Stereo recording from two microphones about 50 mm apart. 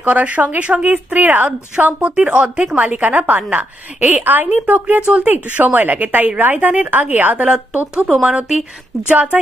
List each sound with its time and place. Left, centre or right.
0.0 s a woman's voice: right
2.7 s a woman's voice: right
7.9 s speech: centre
9.1 s a woman's voice: right